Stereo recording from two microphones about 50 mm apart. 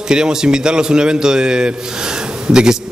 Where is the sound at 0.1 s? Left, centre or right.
Centre.